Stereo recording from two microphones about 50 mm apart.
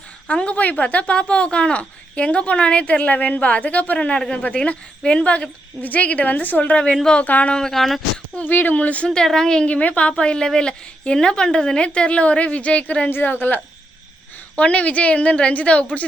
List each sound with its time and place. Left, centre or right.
0.3 s speech: left
3.9 s speech: centre
7.5 s speech: centre
8.4 s speech: left
9.0 s a woman's voice: centre
9.6 s speech: left
13.1 s a woman's voice: left
14.5 s speech: left